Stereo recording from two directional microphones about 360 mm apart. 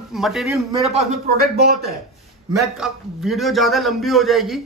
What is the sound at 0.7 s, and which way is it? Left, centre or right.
Speech, centre.